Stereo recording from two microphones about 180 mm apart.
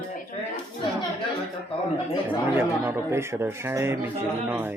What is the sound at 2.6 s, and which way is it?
A man's voice, 10° right (ahead or behind).